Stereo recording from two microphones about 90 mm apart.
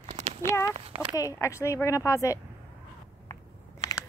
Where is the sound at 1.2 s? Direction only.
35° left (ahead or behind).